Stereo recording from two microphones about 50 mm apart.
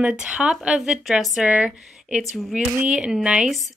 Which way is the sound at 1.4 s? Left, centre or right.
Centre.